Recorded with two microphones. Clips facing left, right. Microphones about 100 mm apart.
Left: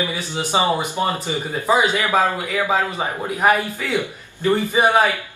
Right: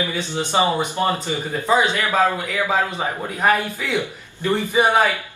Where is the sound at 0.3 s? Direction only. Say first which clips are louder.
Even; 10° left (ahead or behind).